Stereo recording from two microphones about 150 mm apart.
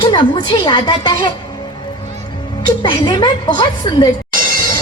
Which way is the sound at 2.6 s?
30° left (ahead or behind).